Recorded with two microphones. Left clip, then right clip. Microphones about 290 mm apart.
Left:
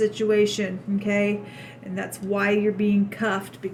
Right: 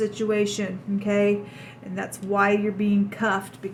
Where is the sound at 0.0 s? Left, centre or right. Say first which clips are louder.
Left 3 dB; centre.